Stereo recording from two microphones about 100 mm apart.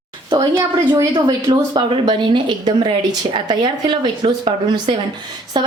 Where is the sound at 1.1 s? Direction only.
50° right (ahead or behind).